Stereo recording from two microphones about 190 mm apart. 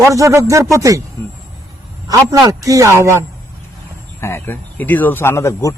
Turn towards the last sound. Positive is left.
turn(degrees=15)  # may be behind; listen again after turning